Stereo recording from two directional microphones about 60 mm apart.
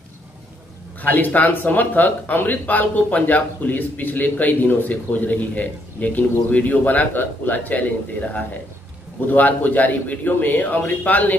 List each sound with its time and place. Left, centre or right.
1.0 s speech: left